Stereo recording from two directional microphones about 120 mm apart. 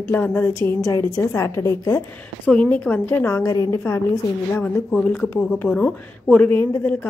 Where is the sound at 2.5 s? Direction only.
10° left (ahead or behind); by 3.8 s 30° left (ahead or behind).